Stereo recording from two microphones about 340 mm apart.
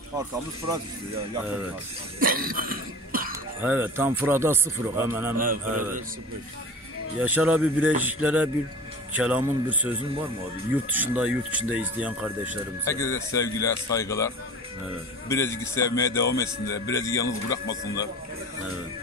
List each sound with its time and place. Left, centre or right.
2.1 s cough: right
3.6 s speech: centre
5.4 s speech: right
7.2 s speech: centre
12.8 s speech: centre